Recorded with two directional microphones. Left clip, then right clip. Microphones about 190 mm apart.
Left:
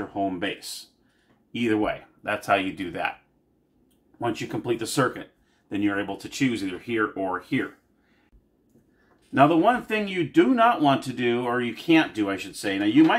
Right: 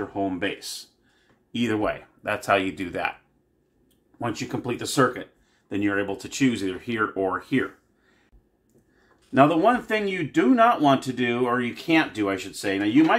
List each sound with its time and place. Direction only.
0.1 s speech: 25° right (ahead or behind)
1.5 s speech: 30° right (ahead or behind)
4.4 s speech: 25° right (ahead or behind)
9.3 s speech: 25° right (ahead or behind)